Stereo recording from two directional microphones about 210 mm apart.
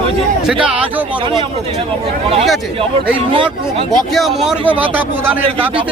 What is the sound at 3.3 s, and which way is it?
Speech, 25° right (ahead or behind).